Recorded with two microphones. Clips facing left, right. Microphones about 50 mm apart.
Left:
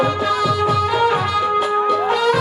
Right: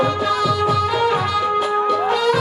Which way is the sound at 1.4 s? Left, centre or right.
Centre.